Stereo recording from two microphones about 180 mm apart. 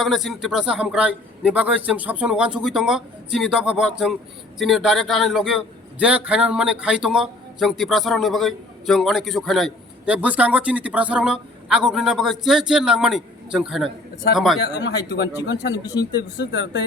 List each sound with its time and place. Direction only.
0.0 s a man's voice: centre (ahead or behind)
14.6 s speech: 70° left (ahead or behind)
16.4 s speech: 80° left